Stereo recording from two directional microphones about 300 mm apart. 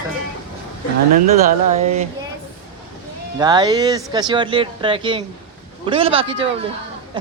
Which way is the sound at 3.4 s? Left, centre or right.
Centre.